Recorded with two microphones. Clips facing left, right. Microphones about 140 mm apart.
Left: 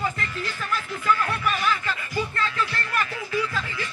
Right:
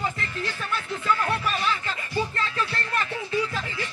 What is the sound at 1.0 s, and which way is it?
Music, 30° right (ahead or behind).